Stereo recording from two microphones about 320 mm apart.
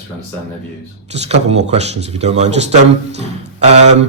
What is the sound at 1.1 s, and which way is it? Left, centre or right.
A man's voice, centre.